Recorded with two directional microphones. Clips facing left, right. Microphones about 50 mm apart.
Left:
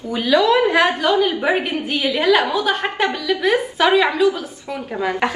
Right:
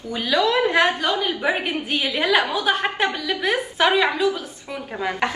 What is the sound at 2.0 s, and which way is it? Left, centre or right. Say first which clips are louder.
A woman's voice: left 5 dB; centre.